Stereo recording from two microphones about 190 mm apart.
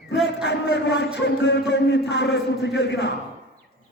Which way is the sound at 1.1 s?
65° left (ahead or behind).